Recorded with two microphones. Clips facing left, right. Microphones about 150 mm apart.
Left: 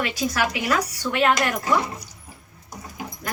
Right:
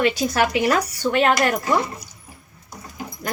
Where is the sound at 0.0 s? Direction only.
25° right (ahead or behind).